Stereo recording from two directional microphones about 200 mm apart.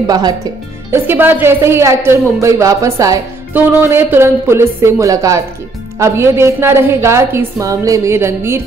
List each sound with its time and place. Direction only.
0.0 s speech: 20° right (ahead or behind)